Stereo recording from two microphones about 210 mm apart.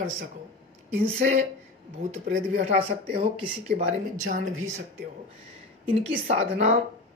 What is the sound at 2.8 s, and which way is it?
Speech, 30° right (ahead or behind).